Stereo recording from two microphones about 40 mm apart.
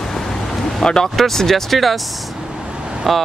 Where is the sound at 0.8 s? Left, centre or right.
Centre.